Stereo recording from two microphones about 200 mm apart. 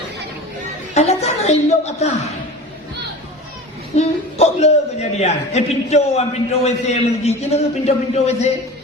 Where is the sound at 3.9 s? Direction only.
30° left (ahead or behind).